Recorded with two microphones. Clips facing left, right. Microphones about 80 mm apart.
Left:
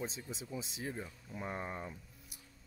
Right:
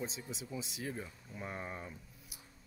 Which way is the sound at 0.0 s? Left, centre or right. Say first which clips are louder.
Even; left.